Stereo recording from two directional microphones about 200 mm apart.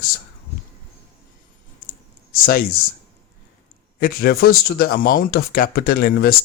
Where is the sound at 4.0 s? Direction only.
50° left (ahead or behind).